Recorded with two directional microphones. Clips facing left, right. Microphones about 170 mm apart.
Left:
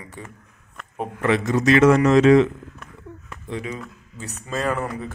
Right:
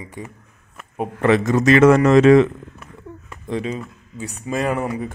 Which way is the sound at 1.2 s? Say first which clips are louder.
Right 4 dB; 45° right (ahead or behind).